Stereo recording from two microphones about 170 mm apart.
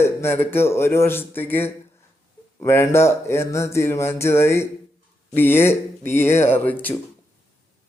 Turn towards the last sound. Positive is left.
turn(degrees=10)  # may be behind; listen again after turning